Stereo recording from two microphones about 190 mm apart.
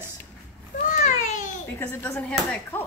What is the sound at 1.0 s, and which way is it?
Babbling, 40° left (ahead or behind).